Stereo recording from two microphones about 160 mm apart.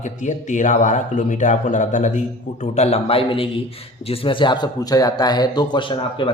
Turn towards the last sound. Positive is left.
turn(degrees=30)  # may be behind; listen again after turning